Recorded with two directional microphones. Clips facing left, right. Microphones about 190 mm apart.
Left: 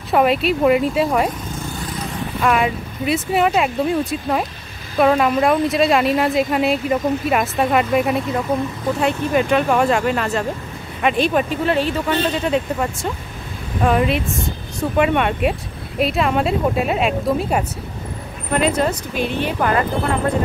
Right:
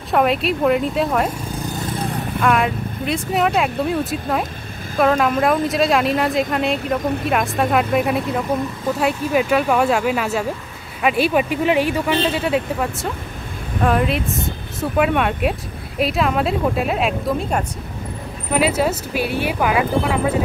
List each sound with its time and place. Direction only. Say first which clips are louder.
0.1 s a woman's voice: left 2 dB; centre (ahead or behind)
1.5 s vehicle: right 2 dB; 40° right (ahead or behind)
2.4 s a woman's voice: even; centre (ahead or behind)
18.5 s speech: even; 5° right (ahead or behind)